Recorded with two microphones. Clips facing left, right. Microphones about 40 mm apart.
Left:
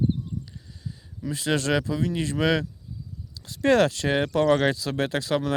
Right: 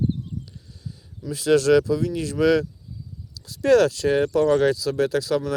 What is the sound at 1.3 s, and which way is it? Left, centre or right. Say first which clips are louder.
Speech: right 7 dB; left.